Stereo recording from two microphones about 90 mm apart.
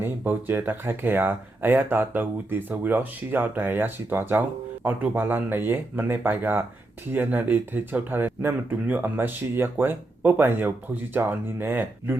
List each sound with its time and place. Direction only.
0.0 s speech: 25° right (ahead or behind)